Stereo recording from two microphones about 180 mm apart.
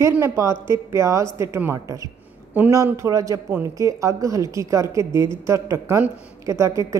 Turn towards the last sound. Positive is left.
turn(degrees=-15)  # may be behind; listen again after turning